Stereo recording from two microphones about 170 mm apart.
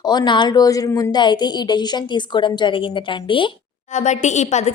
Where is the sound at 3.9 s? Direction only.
45° left (ahead or behind).